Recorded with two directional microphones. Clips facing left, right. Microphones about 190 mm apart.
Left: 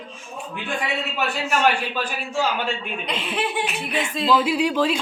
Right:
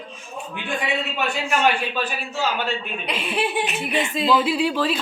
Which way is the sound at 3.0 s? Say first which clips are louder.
Right 1 dB; 10° right (ahead or behind).